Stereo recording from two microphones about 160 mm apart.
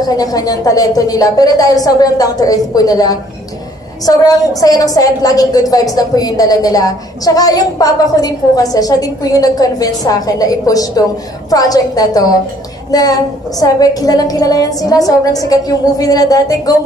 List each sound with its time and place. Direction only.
0.1 s a woman's voice: 25° left (ahead or behind)